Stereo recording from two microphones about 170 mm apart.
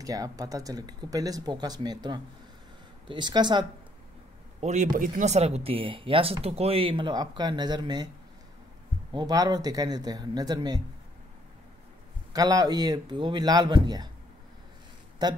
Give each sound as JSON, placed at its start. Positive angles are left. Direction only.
{"t": 0.0, "sound": "speech", "side_deg": -20}
{"t": 4.6, "sound": "speech", "side_deg": -45}
{"t": 9.1, "sound": "speech", "side_deg": -25}
{"t": 12.3, "sound": "speech", "side_deg": -20}
{"t": 15.2, "sound": "speech", "side_deg": -25}